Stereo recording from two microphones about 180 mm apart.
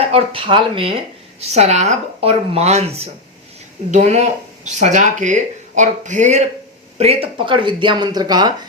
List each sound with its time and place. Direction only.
0.0 s speech: 30° right (ahead or behind)